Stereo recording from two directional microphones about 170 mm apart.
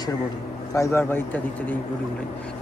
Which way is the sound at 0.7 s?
15° left (ahead or behind).